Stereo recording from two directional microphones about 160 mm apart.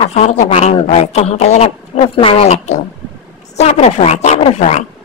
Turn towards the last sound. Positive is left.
turn(degrees=45)  # may be behind; listen again after turning